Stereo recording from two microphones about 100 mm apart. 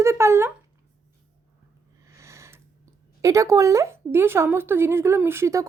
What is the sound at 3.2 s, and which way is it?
Speech, 30° right (ahead or behind).